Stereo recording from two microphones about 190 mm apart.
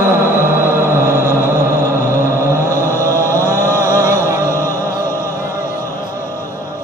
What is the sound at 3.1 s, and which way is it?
Chant, 15° right (ahead or behind).